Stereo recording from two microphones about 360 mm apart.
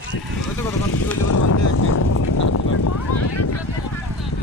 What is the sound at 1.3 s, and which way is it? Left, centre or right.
Vehicle, left.